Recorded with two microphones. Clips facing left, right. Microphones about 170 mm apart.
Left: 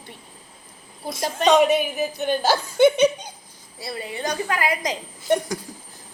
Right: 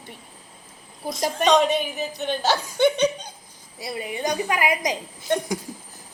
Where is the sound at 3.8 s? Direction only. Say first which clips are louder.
Right 1 dB; 15° right (ahead or behind).